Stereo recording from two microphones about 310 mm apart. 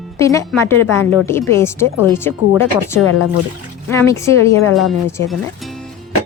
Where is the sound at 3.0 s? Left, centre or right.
Left.